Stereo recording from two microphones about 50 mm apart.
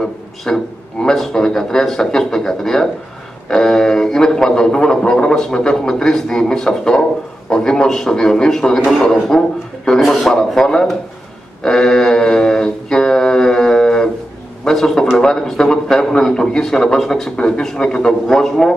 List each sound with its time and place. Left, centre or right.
0.5 s a man's voice: centre
10.3 s speech: centre
11.6 s mantra: centre
14.6 s a sound: centre
15.1 s speech: centre